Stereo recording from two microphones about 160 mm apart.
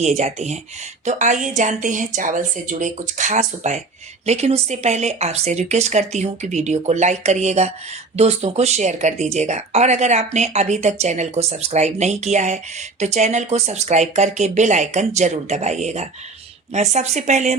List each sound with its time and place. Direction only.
0.0 s speech: 45° right (ahead or behind)